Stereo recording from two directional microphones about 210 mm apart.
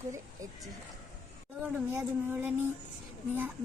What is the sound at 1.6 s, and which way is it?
Speech, 5° right (ahead or behind).